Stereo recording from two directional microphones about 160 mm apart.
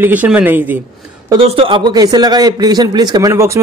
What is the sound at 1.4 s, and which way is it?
Speech, 35° right (ahead or behind).